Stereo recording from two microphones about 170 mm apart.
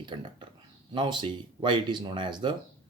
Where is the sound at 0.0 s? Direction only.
30° right (ahead or behind).